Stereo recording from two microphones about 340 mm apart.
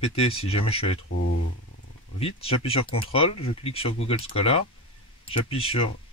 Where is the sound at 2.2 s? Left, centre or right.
Centre.